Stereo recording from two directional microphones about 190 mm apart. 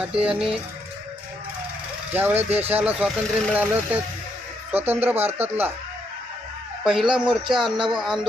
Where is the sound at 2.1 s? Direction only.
10° right (ahead or behind).